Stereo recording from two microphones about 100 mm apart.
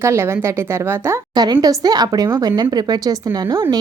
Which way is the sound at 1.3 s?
40° right (ahead or behind).